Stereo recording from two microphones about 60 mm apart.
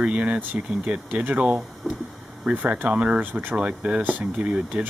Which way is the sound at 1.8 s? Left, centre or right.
Centre.